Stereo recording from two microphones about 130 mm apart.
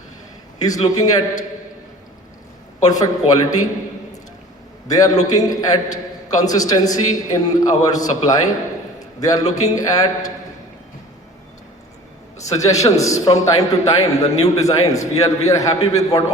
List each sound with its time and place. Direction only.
0.6 s a man's voice: 30° left (ahead or behind)
2.8 s a man's voice: 30° left (ahead or behind)
4.9 s a man's voice: 30° left (ahead or behind)
12.6 s a man's voice: 25° left (ahead or behind)